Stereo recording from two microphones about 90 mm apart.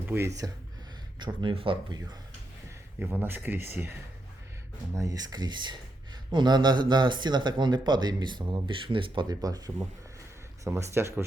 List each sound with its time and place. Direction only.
0.2 s speech: 40° right (ahead or behind)
1.2 s speech: 65° right (ahead or behind)
3.0 s speech: 20° right (ahead or behind)
4.9 s speech: 40° right (ahead or behind); by 9.2 s 70° right (ahead or behind)
9.3 s speech: 45° right (ahead or behind)
10.6 s speech: 30° right (ahead or behind)